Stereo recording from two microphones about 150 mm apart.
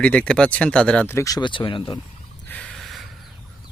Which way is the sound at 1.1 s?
25° left (ahead or behind).